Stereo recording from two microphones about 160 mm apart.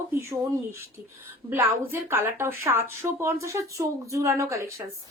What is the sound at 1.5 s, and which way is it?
A woman's voice, 15° right (ahead or behind).